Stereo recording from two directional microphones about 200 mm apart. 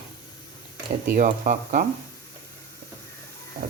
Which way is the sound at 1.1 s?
40° right (ahead or behind).